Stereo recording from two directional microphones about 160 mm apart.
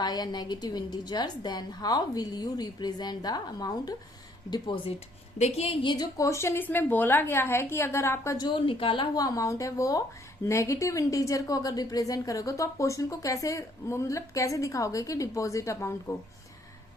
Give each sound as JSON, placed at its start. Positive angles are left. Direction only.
{"t": 0.0, "sound": "a woman's voice", "side_deg": 25}
{"t": 5.4, "sound": "a woman's voice", "side_deg": 40}